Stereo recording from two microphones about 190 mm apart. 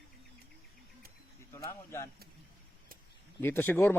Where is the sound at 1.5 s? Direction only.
15° left (ahead or behind).